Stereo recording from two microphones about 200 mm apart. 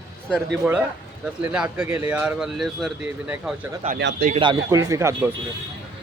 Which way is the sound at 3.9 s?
60° right (ahead or behind).